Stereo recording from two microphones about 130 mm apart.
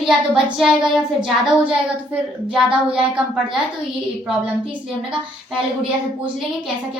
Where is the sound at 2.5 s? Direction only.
5° right (ahead or behind).